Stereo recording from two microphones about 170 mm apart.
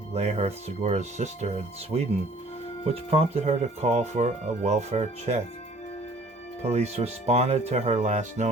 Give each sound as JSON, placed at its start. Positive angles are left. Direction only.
{"t": 0.1, "sound": "speech", "side_deg": -40}
{"t": 6.6, "sound": "speech", "side_deg": -40}